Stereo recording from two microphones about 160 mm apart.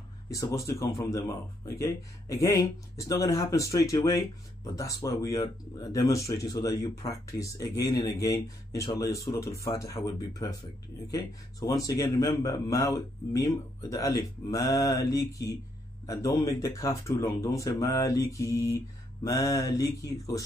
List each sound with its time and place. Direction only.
0.3 s a man's voice: 20° left (ahead or behind)